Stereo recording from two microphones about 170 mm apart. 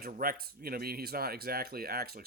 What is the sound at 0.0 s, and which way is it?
Speech, 60° right (ahead or behind).